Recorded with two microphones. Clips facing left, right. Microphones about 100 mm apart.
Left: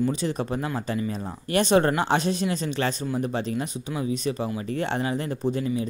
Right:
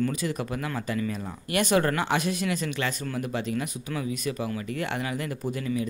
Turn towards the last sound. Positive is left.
turn(degrees=25)  # may be behind; listen again after turning